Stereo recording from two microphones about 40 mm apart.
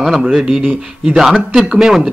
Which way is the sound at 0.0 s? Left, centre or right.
Centre.